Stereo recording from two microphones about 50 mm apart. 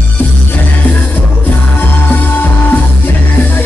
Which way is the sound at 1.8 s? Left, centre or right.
Left.